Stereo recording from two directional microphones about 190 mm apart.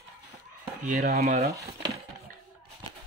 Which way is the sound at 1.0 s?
55° right (ahead or behind).